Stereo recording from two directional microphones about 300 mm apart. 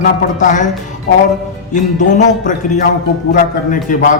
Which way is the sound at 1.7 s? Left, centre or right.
Left.